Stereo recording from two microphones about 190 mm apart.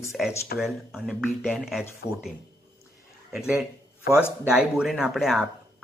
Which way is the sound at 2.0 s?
55° left (ahead or behind).